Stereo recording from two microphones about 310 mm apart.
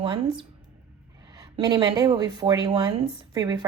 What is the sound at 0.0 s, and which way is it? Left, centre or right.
A woman's voice, centre.